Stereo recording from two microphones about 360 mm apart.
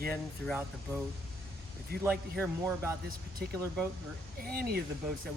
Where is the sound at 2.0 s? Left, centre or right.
Centre.